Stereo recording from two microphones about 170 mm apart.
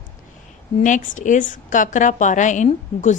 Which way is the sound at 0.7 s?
50° left (ahead or behind).